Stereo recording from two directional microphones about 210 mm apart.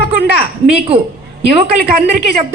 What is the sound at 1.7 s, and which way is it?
Speech, 50° right (ahead or behind).